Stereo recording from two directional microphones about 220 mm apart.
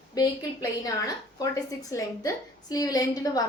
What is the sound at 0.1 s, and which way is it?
A woman's voice, 15° left (ahead or behind).